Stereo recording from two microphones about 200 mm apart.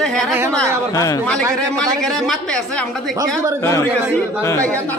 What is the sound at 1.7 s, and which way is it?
Speech, centre (ahead or behind).